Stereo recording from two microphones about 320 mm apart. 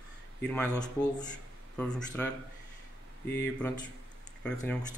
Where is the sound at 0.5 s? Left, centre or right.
Centre.